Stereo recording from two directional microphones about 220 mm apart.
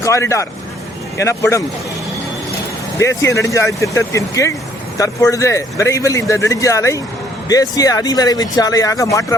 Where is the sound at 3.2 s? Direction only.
15° left (ahead or behind).